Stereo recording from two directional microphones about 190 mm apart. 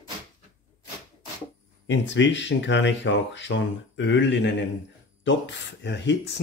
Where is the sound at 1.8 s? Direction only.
70° left (ahead or behind).